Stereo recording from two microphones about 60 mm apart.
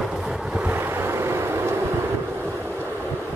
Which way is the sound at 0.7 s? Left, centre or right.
Right.